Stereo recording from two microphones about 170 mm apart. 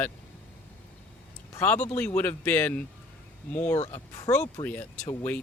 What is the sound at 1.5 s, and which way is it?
Speech, 10° left (ahead or behind).